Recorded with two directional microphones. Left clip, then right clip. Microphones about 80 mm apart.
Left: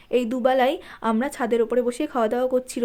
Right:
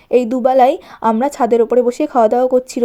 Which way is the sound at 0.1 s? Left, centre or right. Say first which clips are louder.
Right 8 dB; right.